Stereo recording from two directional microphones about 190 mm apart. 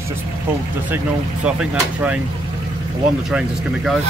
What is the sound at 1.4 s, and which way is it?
Speech, 5° right (ahead or behind).